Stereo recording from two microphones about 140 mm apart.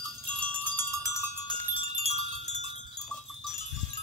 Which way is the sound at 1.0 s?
30° left (ahead or behind).